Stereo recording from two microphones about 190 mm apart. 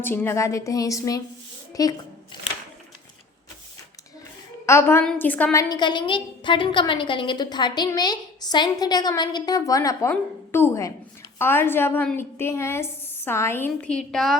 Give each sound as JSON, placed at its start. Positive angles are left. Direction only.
{"t": 0.0, "sound": "a woman's voice", "side_deg": 10}
{"t": 4.6, "sound": "a woman's voice", "side_deg": 15}